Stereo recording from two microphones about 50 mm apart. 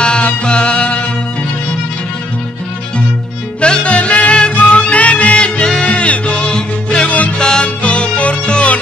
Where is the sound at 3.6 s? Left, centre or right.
Left.